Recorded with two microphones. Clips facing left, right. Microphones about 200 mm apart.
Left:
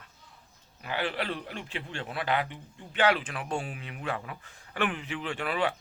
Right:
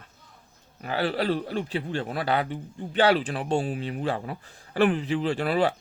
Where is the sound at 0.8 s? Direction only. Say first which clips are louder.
Right 6 dB; 40° right (ahead or behind).